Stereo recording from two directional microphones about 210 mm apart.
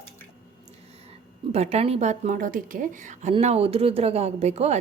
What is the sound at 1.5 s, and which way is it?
A woman's voice, 30° right (ahead or behind).